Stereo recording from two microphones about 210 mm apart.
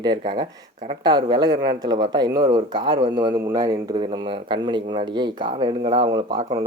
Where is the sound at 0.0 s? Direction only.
20° right (ahead or behind).